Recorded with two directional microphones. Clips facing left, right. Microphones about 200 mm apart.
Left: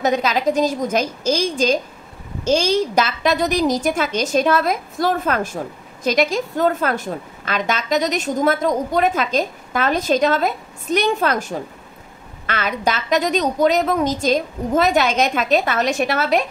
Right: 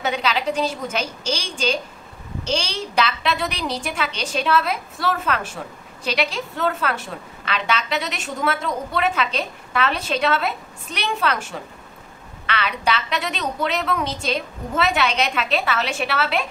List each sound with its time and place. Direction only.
0.0 s a woman's voice: 40° left (ahead or behind)